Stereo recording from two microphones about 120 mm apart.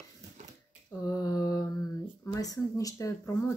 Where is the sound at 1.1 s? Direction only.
30° left (ahead or behind).